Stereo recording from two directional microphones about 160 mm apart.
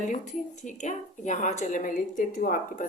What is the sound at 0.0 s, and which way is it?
A woman's voice, 50° left (ahead or behind).